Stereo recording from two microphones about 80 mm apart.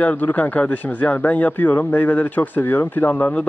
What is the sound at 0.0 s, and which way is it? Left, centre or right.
A man's voice, left.